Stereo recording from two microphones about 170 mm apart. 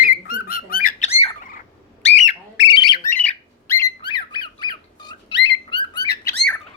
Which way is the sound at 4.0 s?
25° left (ahead or behind).